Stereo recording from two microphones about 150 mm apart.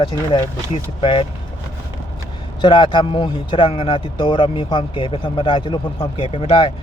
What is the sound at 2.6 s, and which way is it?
A man's voice, 30° left (ahead or behind).